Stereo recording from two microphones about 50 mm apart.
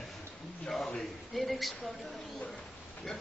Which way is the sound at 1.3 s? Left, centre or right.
Centre.